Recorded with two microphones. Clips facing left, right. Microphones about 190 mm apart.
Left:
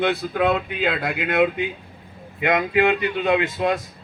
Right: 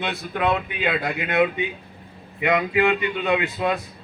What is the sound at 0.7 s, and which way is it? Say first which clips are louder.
Speech: left 2 dB; 60° right (ahead or behind).